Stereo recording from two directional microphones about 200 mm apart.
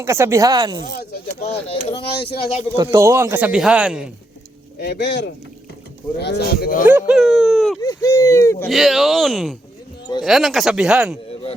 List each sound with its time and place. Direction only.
0.0 s a man's voice: 15° right (ahead or behind)
0.9 s speech: 50° left (ahead or behind)
1.4 s speech: 30° left (ahead or behind)
2.7 s a man's voice: 15° right (ahead or behind)
4.8 s speech: 60° left (ahead or behind)
6.8 s speech: 5° right (ahead or behind)
7.8 s speech: 15° left (ahead or behind)
8.6 s speech: centre (ahead or behind)